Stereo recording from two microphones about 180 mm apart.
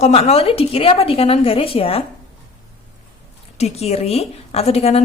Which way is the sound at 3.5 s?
35° left (ahead or behind).